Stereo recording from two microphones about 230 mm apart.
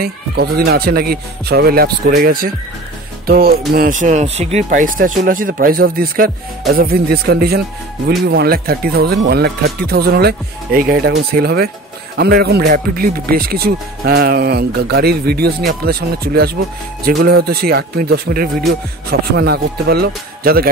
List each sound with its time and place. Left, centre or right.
0.0 s speech: right